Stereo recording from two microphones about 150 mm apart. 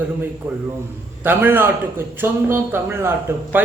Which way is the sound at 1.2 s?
15° right (ahead or behind).